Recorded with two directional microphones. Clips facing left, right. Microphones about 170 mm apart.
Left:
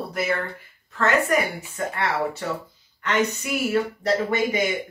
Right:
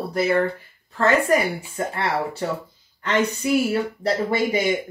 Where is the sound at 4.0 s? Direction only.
30° right (ahead or behind).